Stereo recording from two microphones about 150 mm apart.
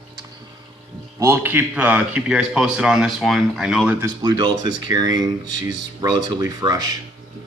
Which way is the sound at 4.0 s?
25° right (ahead or behind).